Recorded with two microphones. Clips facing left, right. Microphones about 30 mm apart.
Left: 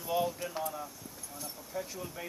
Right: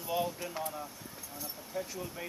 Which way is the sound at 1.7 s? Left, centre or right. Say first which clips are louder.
Right 1 dB; centre.